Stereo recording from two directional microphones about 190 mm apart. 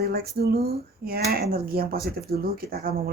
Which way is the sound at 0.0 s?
55° right (ahead or behind).